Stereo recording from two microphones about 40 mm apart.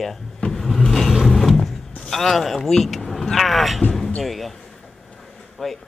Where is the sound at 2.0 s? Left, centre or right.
Centre.